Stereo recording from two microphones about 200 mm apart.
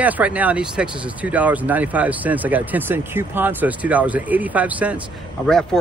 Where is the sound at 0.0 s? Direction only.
5° right (ahead or behind).